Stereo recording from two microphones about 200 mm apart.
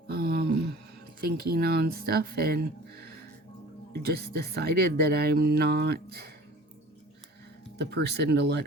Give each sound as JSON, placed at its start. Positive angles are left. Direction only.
{"t": 0.1, "sound": "a sound", "side_deg": -50}
{"t": 1.2, "sound": "speech", "side_deg": -50}
{"t": 7.8, "sound": "speech", "side_deg": -55}